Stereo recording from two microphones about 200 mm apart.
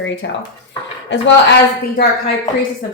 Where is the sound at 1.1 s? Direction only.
60° left (ahead or behind).